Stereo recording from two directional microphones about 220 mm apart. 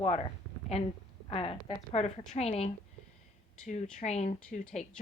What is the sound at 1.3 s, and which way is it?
A woman's voice, 25° left (ahead or behind).